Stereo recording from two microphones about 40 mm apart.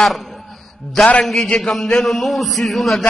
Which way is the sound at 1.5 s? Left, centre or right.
Centre.